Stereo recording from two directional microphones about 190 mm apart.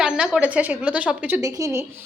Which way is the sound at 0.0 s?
5° right (ahead or behind).